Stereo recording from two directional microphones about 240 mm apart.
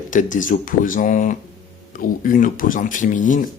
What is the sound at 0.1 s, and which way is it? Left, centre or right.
Speech, left.